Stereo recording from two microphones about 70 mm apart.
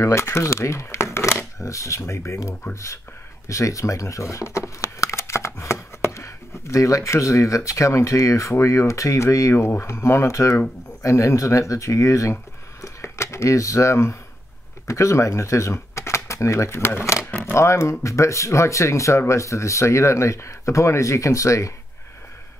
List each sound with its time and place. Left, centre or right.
0.0 s speech: left
12.8 s a sound: left
14.9 s speech: left